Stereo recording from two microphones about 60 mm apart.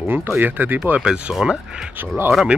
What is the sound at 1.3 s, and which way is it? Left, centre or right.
Speech, centre.